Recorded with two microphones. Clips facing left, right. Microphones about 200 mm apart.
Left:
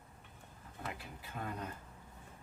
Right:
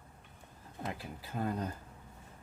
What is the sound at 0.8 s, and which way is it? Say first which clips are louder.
Speech: right 5 dB; 35° right (ahead or behind).